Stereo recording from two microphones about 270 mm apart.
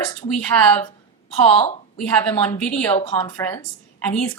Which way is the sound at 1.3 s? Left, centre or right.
Left.